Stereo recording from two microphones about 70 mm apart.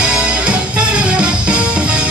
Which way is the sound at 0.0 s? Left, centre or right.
Centre.